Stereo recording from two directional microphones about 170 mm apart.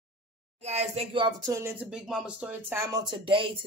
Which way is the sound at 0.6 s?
40° right (ahead or behind).